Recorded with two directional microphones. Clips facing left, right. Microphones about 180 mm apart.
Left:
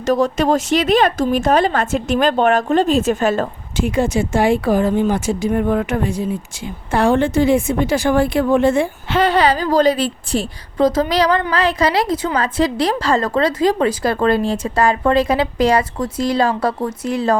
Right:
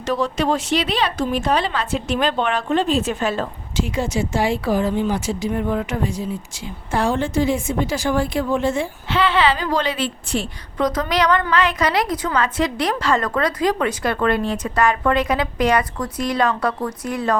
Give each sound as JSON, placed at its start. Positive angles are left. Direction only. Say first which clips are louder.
{"t": 0.0, "sound": "a woman's voice", "louder": "left 5 dB", "side_deg": 45}